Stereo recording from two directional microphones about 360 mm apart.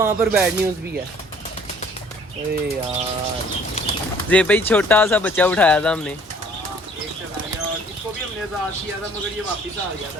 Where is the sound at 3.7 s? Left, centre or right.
Centre.